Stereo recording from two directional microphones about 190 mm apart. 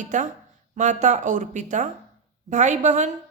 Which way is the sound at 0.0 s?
40° right (ahead or behind).